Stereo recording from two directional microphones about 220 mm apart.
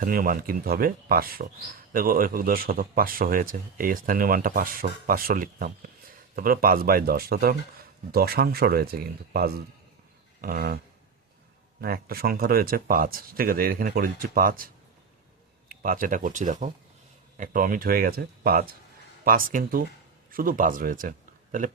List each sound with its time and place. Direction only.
0.0 s speech: 40° right (ahead or behind)
10.4 s a sound: 45° right (ahead or behind)
11.8 s speech: 45° right (ahead or behind)
15.7 s speech: 40° right (ahead or behind)